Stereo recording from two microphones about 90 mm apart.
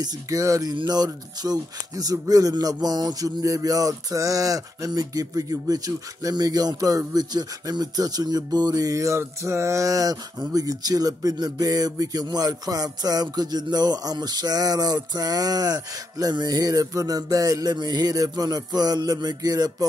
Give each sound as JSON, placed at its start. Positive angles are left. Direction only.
{"t": 0.0, "sound": "speech", "side_deg": -40}